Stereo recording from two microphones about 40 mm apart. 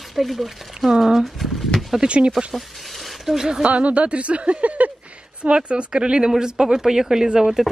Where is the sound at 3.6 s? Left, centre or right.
Right; by 7.6 s centre.